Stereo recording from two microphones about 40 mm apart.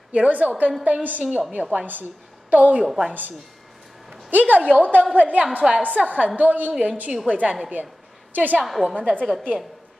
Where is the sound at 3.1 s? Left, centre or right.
Right.